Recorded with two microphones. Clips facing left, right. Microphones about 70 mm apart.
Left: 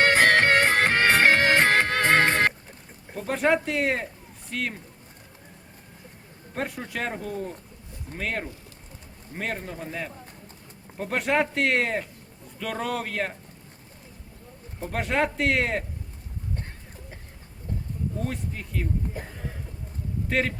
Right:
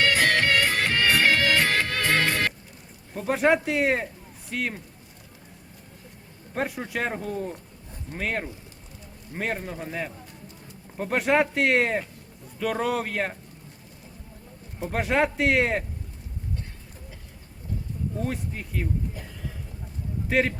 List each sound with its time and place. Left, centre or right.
0.0 s music: left
3.2 s a man's voice: centre
6.6 s a man's voice: centre
14.8 s speech: centre
18.2 s a man's voice: centre
19.2 s a sound: left
20.2 s speech: centre